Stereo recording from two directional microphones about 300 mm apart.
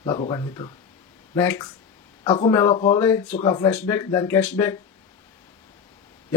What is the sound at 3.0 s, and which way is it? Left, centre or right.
Speech, centre.